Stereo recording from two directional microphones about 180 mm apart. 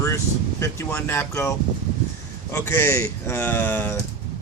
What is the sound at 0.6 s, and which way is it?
Speech, 10° left (ahead or behind).